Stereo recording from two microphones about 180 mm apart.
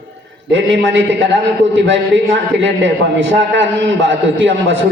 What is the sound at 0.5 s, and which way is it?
A man's voice, 90° right.